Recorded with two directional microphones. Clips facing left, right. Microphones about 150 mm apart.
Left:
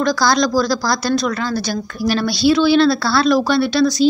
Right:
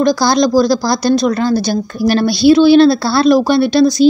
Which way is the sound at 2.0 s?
50° right (ahead or behind).